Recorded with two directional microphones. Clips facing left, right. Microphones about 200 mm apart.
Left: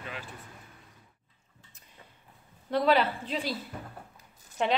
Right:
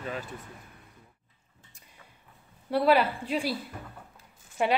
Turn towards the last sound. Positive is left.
turn(degrees=-10)  # may be behind; listen again after turning